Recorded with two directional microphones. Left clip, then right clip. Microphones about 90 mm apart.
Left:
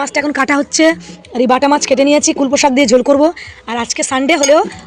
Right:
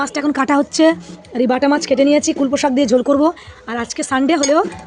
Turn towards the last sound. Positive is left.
turn(degrees=-5)  # may be behind; listen again after turning